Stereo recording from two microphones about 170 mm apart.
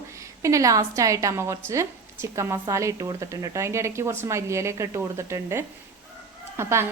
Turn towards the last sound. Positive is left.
turn(degrees=-15)  # may be behind; listen again after turning